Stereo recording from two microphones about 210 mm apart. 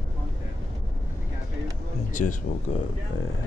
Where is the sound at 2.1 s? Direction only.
35° left (ahead or behind).